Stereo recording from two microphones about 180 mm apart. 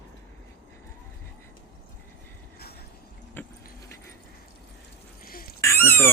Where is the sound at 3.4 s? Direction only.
10° left (ahead or behind).